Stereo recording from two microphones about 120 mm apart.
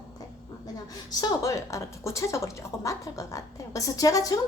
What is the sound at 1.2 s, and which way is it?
A woman's voice, 25° left (ahead or behind).